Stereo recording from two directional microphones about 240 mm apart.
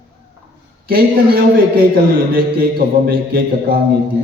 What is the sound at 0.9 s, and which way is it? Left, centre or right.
A man's voice, right.